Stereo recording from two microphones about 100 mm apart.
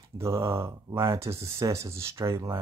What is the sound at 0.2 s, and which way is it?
Speech, 25° right (ahead or behind).